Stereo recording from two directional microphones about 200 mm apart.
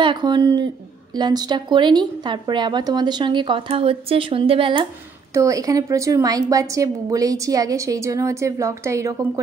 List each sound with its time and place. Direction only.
0.0 s a woman's voice: 25° right (ahead or behind)